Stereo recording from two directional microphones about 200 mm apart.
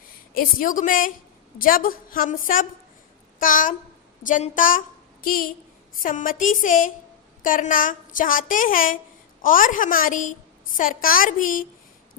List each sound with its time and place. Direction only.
0.3 s a woman's voice: 45° left (ahead or behind)